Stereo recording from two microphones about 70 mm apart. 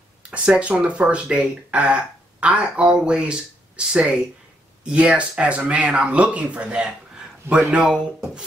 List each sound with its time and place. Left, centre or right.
0.2 s speech: centre